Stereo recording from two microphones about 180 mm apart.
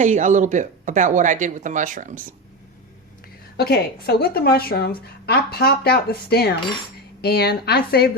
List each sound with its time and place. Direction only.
0.0 s speech: 45° right (ahead or behind)
3.6 s a woman's voice: 60° left (ahead or behind)